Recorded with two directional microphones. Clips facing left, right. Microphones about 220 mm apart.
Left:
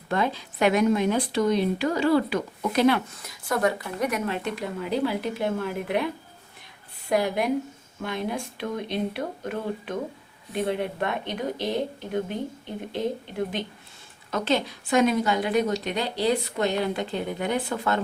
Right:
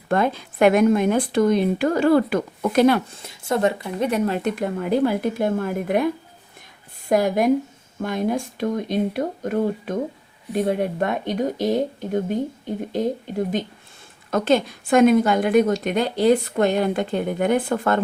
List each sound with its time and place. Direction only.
0.1 s a woman's voice: 50° right (ahead or behind)
3.1 s speech: 25° right (ahead or behind)
4.3 s a woman's voice: 50° right (ahead or behind)
7.1 s a woman's voice: 45° right (ahead or behind)